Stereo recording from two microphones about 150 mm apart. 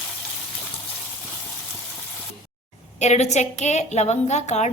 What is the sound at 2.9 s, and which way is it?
A woman's voice, 50° left (ahead or behind).